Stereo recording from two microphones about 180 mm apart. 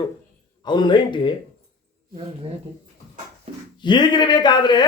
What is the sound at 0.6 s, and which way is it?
Speech, 25° left (ahead or behind).